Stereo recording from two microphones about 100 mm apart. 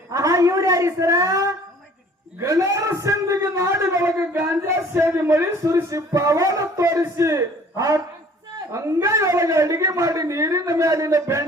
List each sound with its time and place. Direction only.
0.1 s a man's voice: 35° right (ahead or behind)